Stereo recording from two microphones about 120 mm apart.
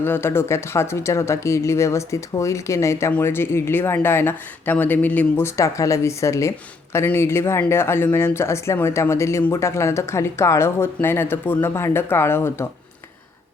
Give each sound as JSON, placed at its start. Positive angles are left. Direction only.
{"t": 0.0, "sound": "speech", "side_deg": 20}